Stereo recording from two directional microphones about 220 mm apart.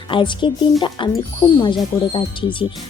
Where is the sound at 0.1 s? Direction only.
20° left (ahead or behind).